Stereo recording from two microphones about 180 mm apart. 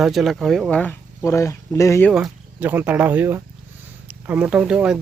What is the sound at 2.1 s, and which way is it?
Speech, 5° right (ahead or behind).